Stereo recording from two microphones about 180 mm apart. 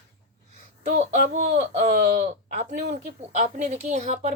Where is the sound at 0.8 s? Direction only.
40° right (ahead or behind).